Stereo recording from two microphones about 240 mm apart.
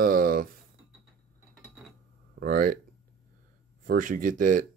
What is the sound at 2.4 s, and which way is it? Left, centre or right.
Speech, right.